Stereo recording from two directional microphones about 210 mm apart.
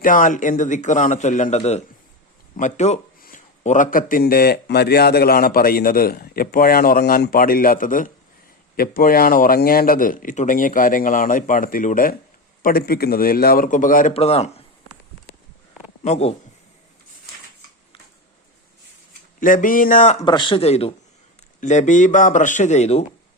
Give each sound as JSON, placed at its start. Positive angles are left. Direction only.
{"t": 0.0, "sound": "a man's voice", "side_deg": 40}
{"t": 16.0, "sound": "a man's voice", "side_deg": 30}
{"t": 19.4, "sound": "a man's voice", "side_deg": 40}
{"t": 20.2, "sound": "a man's voice", "side_deg": 20}